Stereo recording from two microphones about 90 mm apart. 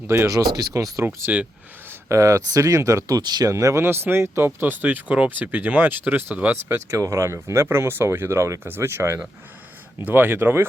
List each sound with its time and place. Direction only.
0.1 s speech: 25° right (ahead or behind)
0.3 s speech: 40° right (ahead or behind)
1.0 s speech: 20° right (ahead or behind)
1.9 s speech: 35° right (ahead or behind)
3.5 s speech: 35° right (ahead or behind)
4.6 s speech: 20° right (ahead or behind)